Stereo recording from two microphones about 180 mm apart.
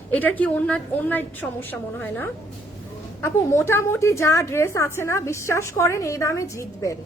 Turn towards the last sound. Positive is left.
turn(degrees=15)  # may be behind; listen again after turning